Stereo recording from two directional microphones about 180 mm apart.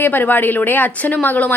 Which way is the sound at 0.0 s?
10° left (ahead or behind).